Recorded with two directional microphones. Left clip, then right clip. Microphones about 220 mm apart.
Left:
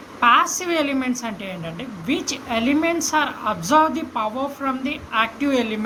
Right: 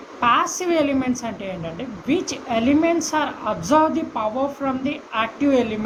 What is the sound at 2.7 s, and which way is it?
Speech, 50° left (ahead or behind).